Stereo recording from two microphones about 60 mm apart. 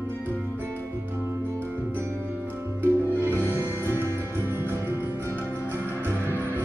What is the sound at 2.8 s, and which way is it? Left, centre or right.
Music, right.